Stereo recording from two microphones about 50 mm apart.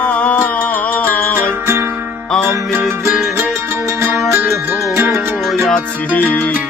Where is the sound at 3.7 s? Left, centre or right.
Right.